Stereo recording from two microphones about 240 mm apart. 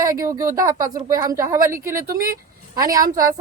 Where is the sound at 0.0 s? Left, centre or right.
Centre.